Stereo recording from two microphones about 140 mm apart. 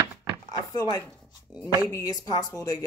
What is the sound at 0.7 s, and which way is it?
Speech, 25° left (ahead or behind).